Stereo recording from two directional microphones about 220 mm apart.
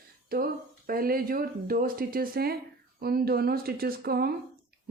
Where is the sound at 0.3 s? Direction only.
40° right (ahead or behind).